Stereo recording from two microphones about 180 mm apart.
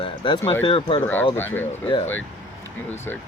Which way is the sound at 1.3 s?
10° left (ahead or behind).